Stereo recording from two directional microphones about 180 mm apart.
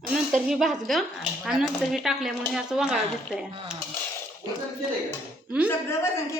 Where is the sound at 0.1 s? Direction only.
5° right (ahead or behind).